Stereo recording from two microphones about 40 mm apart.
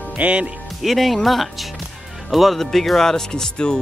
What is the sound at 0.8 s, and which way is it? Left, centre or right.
Speech, centre.